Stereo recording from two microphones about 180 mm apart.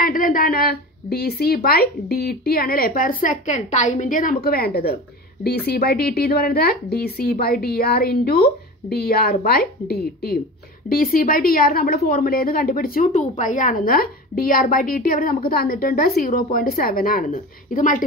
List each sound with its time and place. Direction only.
0.0 s a woman's voice: 50° left (ahead or behind)